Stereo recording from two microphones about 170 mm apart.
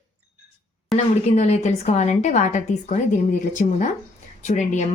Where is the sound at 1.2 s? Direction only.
40° left (ahead or behind).